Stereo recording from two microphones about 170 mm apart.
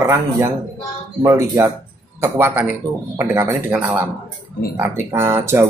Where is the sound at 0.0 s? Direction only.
10° right (ahead or behind).